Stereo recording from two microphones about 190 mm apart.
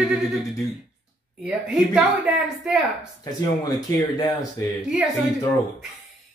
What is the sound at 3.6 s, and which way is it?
Speech, 20° left (ahead or behind).